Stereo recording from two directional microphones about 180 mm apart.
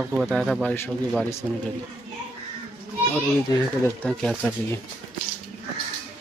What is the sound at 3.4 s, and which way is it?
Speech, 20° left (ahead or behind).